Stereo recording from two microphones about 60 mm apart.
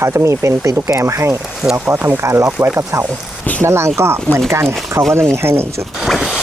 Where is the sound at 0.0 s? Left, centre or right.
Right.